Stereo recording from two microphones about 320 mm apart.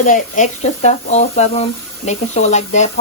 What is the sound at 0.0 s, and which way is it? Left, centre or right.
Speech, left.